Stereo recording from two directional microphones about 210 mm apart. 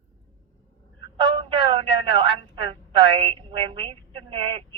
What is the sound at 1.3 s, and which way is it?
A woman's voice, 25° right (ahead or behind).